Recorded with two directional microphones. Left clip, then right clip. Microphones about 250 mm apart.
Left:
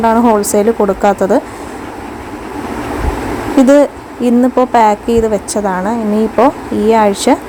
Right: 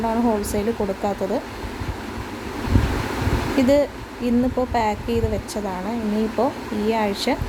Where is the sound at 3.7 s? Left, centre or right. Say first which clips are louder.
Left 10 dB; left.